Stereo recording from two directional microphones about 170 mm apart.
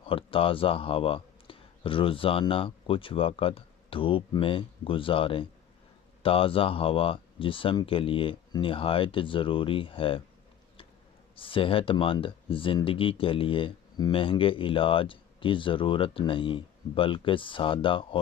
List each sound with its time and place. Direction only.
0.0 s speech: 30° left (ahead or behind)
11.3 s speech: 30° left (ahead or behind)